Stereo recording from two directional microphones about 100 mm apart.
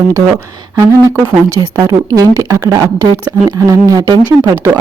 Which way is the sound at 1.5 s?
25° right (ahead or behind).